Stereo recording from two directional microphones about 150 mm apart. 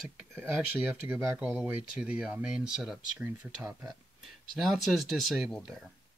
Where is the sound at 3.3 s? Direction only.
15° right (ahead or behind).